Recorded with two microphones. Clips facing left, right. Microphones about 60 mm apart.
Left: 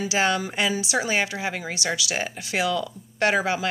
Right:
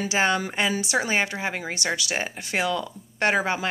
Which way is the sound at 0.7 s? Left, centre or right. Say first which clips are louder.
Even; right.